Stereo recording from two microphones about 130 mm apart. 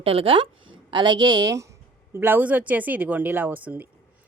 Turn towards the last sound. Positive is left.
turn(degrees=-15)  # may be behind; listen again after turning